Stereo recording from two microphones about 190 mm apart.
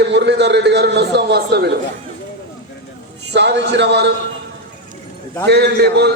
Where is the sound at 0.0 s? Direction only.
65° right (ahead or behind).